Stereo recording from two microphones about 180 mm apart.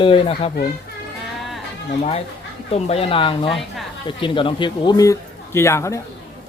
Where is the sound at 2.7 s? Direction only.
35° left (ahead or behind); by 5.9 s 15° left (ahead or behind).